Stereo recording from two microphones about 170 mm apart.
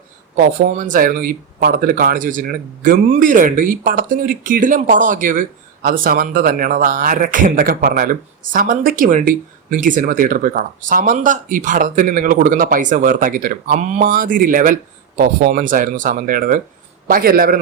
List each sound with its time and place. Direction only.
0.3 s a man's voice: 55° right (ahead or behind)